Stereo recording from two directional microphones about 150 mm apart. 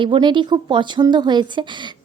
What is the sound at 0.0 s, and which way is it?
A woman's voice, 30° right (ahead or behind).